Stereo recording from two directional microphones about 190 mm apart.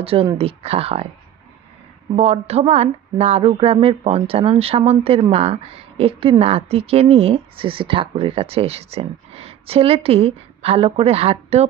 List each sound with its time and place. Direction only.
0.0 s a woman's voice: 30° right (ahead or behind)
2.1 s a woman's voice: 30° right (ahead or behind)